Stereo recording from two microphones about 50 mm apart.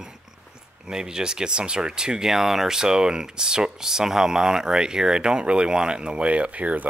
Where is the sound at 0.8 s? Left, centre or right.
Centre.